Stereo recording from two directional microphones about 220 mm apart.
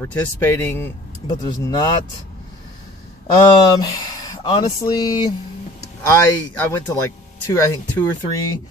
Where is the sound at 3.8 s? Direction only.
15° left (ahead or behind).